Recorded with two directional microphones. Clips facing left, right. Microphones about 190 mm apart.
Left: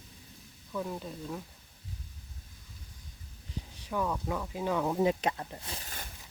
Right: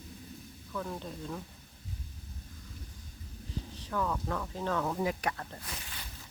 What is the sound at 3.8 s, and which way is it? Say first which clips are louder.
Speech: left 1 dB; 15° left (ahead or behind).